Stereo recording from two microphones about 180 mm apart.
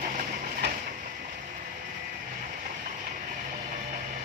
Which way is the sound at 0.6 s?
75° right (ahead or behind).